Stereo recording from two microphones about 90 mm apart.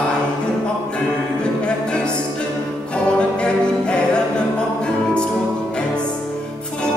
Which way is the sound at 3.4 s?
10° left (ahead or behind).